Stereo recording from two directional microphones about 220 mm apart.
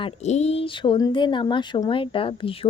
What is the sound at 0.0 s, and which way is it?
Speech, 30° left (ahead or behind).